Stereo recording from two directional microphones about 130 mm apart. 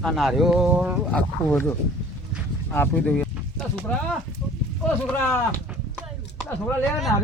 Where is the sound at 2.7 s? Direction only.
15° left (ahead or behind).